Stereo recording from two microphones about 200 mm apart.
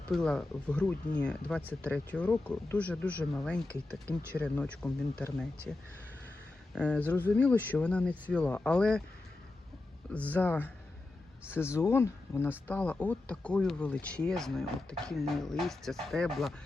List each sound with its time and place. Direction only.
0.1 s speech: 5° left (ahead or behind)
6.7 s speech: 5° left (ahead or behind)
10.1 s speech: 5° left (ahead or behind)